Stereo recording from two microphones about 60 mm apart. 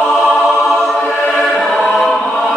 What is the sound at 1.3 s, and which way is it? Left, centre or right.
Choir, centre.